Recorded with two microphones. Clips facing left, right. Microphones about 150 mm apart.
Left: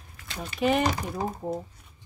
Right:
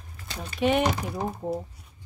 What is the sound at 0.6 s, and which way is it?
Speech, centre (ahead or behind).